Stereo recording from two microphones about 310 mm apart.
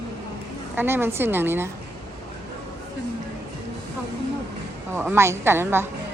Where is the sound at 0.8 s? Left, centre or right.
Centre.